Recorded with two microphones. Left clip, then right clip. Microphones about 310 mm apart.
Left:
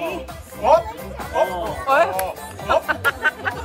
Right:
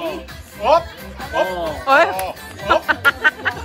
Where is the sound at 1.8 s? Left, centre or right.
Right.